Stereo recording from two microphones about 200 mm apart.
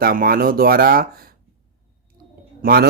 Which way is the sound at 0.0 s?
45° right (ahead or behind).